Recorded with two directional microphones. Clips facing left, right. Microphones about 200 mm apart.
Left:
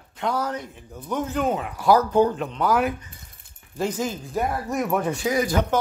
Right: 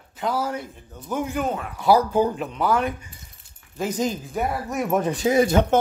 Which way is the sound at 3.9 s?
15° right (ahead or behind).